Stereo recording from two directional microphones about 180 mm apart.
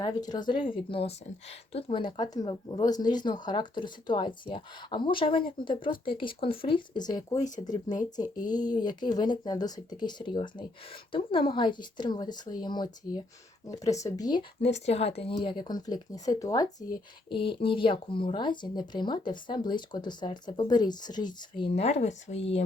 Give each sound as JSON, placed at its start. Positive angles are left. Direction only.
{"t": 0.0, "sound": "speech", "side_deg": 20}
{"t": 14.8, "sound": "speech", "side_deg": 35}